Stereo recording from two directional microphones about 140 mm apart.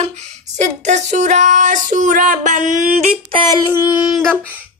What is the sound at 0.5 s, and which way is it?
Female singing, 55° right (ahead or behind).